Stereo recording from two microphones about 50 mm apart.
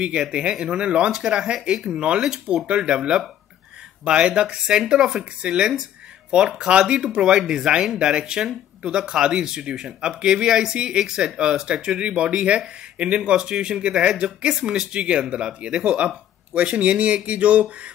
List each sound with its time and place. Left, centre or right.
0.0 s speech: centre